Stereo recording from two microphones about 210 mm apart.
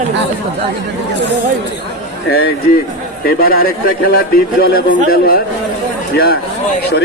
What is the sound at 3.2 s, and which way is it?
A man's voice, 45° left (ahead or behind).